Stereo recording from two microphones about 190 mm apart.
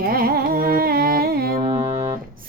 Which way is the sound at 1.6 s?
25° right (ahead or behind).